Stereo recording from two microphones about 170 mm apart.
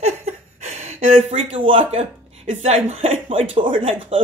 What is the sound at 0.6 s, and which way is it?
Speech, 40° right (ahead or behind).